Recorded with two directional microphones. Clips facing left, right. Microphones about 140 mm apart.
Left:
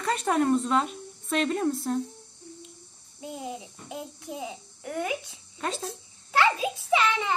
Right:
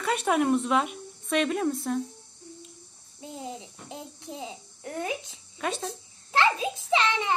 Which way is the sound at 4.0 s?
20° left (ahead or behind).